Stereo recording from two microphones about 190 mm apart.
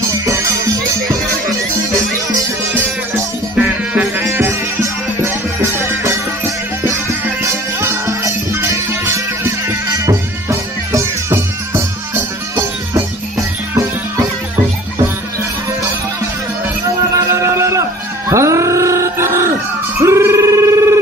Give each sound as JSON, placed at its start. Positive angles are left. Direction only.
{"t": 0.1, "sound": "music", "side_deg": -15}
{"t": 3.5, "sound": "music", "side_deg": -5}
{"t": 7.4, "sound": "music", "side_deg": -15}
{"t": 17.1, "sound": "music", "side_deg": -15}
{"t": 20.0, "sound": "telephone bell ringing", "side_deg": -15}